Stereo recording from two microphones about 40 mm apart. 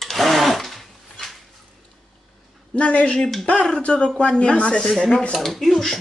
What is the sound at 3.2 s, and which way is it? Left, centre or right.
Speech, centre.